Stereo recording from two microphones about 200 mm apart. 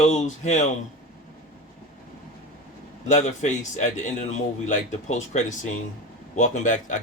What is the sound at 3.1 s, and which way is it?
Speech, 35° left (ahead or behind).